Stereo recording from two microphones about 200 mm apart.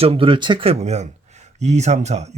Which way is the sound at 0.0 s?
30° right (ahead or behind).